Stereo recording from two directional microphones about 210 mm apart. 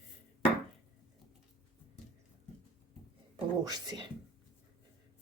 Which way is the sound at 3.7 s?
20° right (ahead or behind).